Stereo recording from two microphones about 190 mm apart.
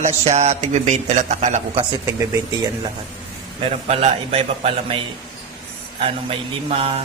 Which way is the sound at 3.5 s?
30° right (ahead or behind).